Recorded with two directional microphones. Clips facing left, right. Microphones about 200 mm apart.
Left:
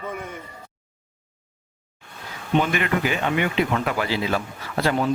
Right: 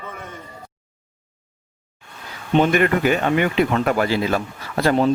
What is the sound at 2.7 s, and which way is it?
Speech, 50° right (ahead or behind).